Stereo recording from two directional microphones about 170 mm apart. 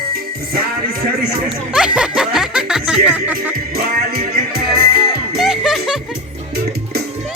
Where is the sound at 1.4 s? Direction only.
5° right (ahead or behind).